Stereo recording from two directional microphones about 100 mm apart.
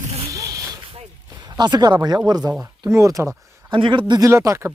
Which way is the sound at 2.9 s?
30° right (ahead or behind).